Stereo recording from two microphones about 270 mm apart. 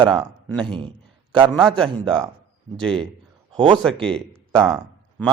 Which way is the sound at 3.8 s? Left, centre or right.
Centre.